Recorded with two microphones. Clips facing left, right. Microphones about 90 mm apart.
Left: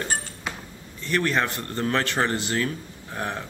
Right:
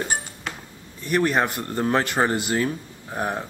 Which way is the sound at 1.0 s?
15° right (ahead or behind).